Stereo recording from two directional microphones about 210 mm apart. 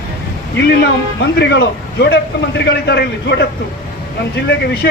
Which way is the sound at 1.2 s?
55° left (ahead or behind).